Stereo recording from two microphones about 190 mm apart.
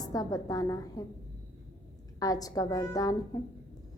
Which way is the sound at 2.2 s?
20° left (ahead or behind).